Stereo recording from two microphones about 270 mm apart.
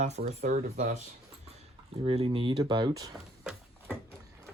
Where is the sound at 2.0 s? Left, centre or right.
Centre.